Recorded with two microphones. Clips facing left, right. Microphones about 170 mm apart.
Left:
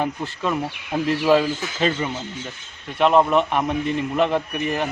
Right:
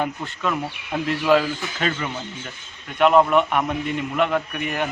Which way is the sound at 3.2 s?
30° left (ahead or behind).